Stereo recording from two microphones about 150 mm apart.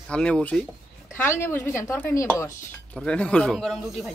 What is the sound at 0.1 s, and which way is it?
Speech, 5° left (ahead or behind).